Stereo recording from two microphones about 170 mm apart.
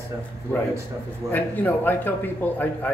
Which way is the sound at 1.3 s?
10° left (ahead or behind).